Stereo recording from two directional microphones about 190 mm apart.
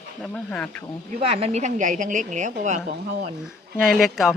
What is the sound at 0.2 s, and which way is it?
Speech, 5° left (ahead or behind).